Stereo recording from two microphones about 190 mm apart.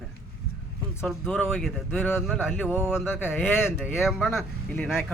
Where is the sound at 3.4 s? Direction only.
10° left (ahead or behind).